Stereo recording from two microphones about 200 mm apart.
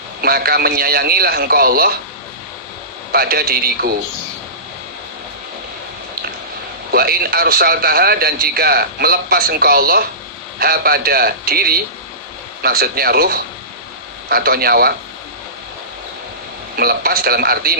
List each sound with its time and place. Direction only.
0.2 s a man's voice: 50° right (ahead or behind)
3.1 s a man's voice: 50° right (ahead or behind)
6.9 s a man's voice: 50° right (ahead or behind)
16.7 s a man's voice: 50° right (ahead or behind)